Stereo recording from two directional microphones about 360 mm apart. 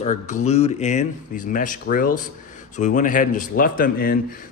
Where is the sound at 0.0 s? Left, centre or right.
Centre.